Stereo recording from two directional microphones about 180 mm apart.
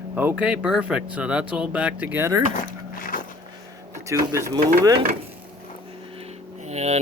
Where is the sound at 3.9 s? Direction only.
15° right (ahead or behind).